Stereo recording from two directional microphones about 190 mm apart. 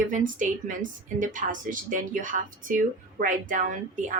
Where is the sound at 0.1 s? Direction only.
45° right (ahead or behind).